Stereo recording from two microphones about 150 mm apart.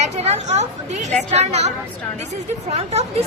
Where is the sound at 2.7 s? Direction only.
45° right (ahead or behind).